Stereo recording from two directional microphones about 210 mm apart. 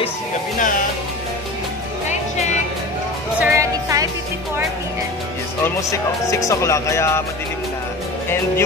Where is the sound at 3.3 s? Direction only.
10° right (ahead or behind).